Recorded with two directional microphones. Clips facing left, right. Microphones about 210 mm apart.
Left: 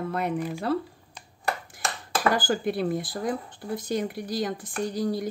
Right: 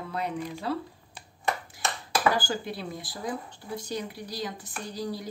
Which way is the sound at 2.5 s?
55° left (ahead or behind).